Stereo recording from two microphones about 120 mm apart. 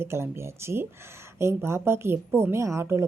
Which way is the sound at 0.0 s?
20° right (ahead or behind).